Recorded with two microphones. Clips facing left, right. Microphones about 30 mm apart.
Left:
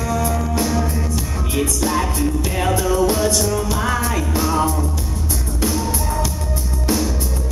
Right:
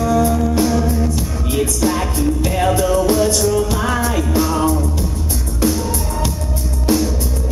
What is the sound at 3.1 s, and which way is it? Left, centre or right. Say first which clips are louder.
Music: right 4 dB; centre.